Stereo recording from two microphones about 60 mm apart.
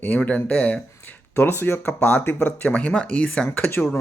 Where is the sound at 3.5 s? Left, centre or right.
Left.